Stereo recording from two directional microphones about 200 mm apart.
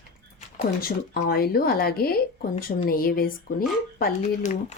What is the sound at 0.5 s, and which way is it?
Speech, 50° left (ahead or behind).